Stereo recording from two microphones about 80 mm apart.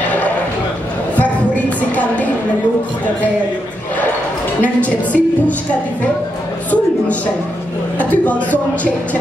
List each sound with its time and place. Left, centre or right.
1.1 s a sound: centre
4.6 s a woman's voice: centre
8.0 s speech: centre